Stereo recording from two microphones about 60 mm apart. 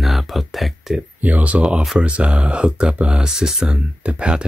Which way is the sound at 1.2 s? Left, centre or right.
Right.